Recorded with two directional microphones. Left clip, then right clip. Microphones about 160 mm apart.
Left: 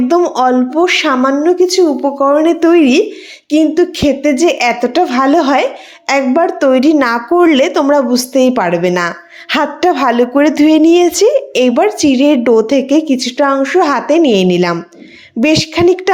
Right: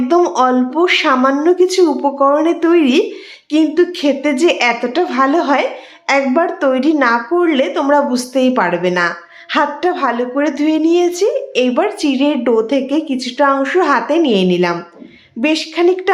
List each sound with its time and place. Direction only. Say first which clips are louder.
0.3 s speech: left 2 dB; 20° left (ahead or behind)
2.3 s speech: left 3 dB; 25° left (ahead or behind)
7.0 s speech: left 3 dB; 40° left (ahead or behind)